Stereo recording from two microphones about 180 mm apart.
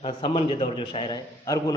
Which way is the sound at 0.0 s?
30° left (ahead or behind).